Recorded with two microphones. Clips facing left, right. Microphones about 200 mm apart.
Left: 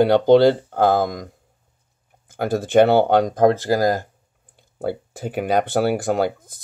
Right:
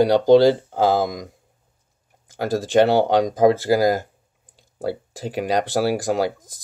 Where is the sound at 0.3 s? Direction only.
60° left (ahead or behind).